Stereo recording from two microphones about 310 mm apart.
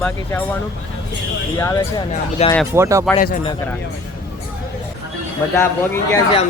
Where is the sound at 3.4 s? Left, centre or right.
Centre.